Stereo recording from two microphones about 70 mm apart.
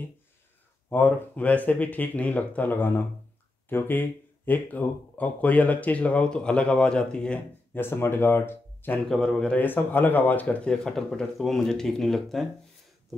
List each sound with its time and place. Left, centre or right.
0.8 s speech: left; by 7.3 s centre
7.7 s speech: left
9.0 s speech: centre
9.6 s speech: left; by 12.4 s centre